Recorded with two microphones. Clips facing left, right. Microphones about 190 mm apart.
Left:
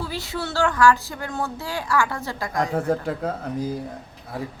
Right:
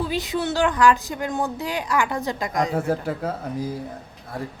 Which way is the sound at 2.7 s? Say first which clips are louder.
Even; 5° right (ahead or behind).